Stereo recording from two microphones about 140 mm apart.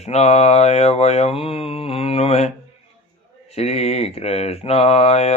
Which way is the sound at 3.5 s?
50° left (ahead or behind).